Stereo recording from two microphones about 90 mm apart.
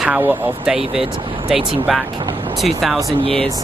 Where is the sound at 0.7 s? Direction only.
90° right.